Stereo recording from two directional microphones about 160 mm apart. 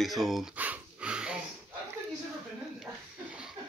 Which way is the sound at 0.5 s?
10° right (ahead or behind).